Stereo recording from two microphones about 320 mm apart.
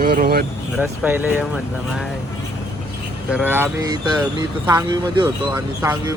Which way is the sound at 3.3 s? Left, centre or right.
Centre.